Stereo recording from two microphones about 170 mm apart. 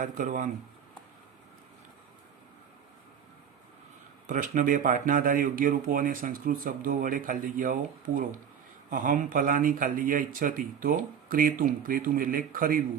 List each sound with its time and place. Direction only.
0.0 s speech: 50° right (ahead or behind)
4.3 s speech: 50° right (ahead or behind)